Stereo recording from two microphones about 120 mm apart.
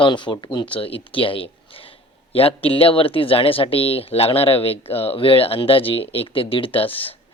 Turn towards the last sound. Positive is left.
turn(degrees=45)  # may be behind; listen again after turning